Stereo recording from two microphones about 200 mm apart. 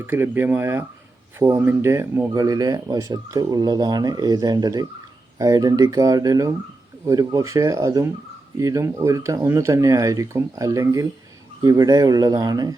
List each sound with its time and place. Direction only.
0.0 s speech: 10° right (ahead or behind)